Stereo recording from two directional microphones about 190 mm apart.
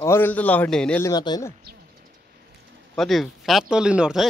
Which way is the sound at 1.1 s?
20° left (ahead or behind).